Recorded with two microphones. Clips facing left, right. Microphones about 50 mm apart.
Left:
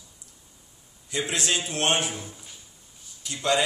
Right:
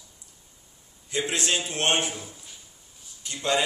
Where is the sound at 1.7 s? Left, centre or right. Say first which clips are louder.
Even; right.